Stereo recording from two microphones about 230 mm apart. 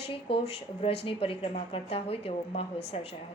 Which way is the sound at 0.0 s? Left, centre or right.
Left.